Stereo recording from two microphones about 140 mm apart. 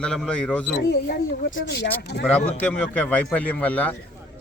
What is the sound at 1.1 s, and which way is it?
Speech, 90° left.